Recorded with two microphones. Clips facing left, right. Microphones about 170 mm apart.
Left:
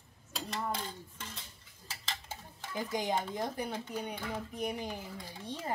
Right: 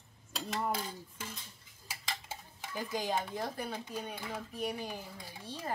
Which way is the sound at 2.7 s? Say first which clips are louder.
Left 1 dB; 20° left (ahead or behind).